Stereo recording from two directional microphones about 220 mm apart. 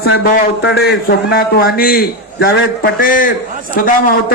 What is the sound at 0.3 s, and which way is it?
A man's voice, 50° left (ahead or behind).